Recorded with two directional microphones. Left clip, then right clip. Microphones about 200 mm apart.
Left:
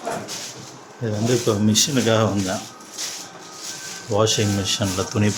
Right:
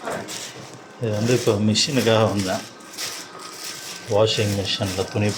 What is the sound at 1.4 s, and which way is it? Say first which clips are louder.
Speech: even; 20° left (ahead or behind).